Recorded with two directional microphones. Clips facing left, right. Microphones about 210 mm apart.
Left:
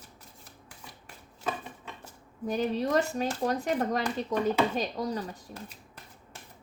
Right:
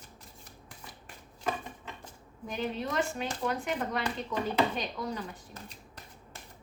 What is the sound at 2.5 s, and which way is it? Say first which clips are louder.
Speech: left 7 dB; 40° left (ahead or behind).